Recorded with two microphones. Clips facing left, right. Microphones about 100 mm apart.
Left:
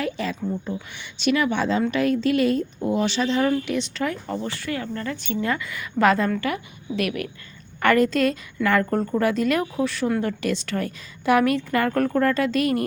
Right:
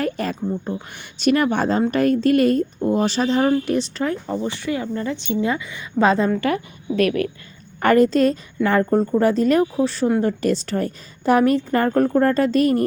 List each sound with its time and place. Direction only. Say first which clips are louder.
0.0 s a woman's voice: right 3 dB; 45° right (ahead or behind)
4.3 s a woman's voice: right 4 dB; 20° right (ahead or behind)
6.5 s a woman's voice: right 6 dB; 40° right (ahead or behind)